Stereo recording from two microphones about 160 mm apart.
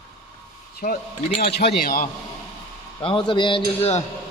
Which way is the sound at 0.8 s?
80° left.